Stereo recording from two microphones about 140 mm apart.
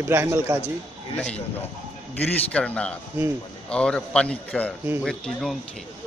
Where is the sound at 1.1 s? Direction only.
10° left (ahead or behind).